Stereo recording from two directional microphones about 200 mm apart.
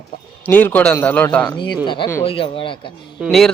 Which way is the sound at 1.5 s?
20° left (ahead or behind).